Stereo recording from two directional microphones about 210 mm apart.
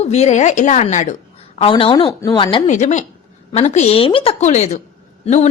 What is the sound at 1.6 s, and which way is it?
A woman's voice, 25° left (ahead or behind).